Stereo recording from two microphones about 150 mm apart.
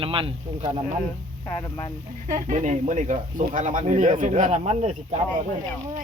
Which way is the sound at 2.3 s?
55° right (ahead or behind).